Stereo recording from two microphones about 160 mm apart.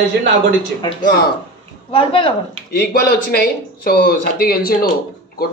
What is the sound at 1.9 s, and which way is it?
Speech, 35° left (ahead or behind).